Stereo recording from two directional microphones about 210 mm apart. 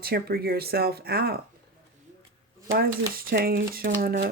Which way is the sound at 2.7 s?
45° right (ahead or behind).